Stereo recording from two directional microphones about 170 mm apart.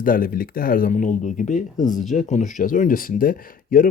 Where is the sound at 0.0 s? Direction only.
55° left (ahead or behind).